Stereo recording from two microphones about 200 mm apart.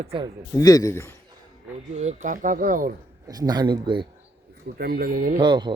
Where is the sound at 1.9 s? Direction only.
35° right (ahead or behind).